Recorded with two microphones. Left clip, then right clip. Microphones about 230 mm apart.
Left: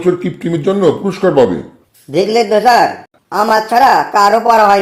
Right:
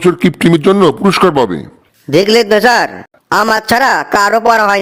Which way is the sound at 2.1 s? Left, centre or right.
Right.